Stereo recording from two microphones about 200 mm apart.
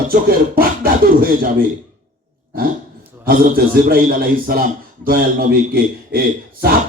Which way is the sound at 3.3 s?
45° right (ahead or behind).